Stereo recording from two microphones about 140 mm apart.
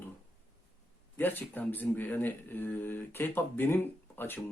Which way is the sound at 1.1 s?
15° left (ahead or behind).